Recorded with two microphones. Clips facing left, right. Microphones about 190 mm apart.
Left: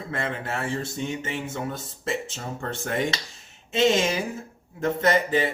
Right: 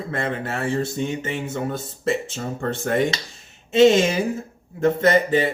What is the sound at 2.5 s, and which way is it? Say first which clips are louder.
Speech: right 6 dB; 40° right (ahead or behind).